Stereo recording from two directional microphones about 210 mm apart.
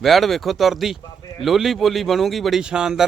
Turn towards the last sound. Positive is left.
turn(degrees=-5)  # may be behind; listen again after turning